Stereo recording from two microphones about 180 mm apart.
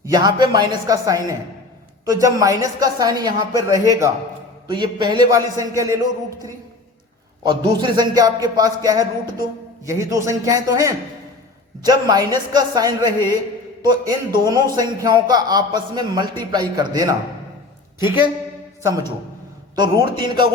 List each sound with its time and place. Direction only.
0.0 s a man's voice: 20° right (ahead or behind)
19.7 s a man's voice: 25° right (ahead or behind)